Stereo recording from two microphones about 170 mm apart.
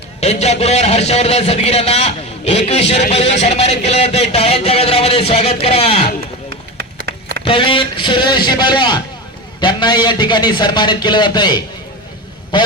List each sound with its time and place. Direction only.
0.2 s a man's voice: 40° left (ahead or behind)
6.7 s run: 65° right (ahead or behind)
7.4 s a man's voice: 30° left (ahead or behind)
12.5 s a man's voice: 25° left (ahead or behind)